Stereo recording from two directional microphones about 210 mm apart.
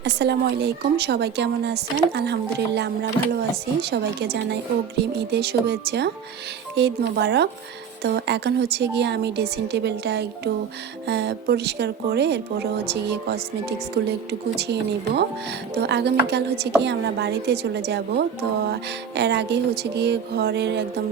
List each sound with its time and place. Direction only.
0.0 s speech: 55° right (ahead or behind)